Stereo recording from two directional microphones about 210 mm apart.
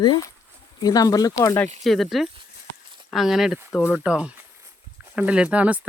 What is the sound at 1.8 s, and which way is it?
Speech, centre (ahead or behind).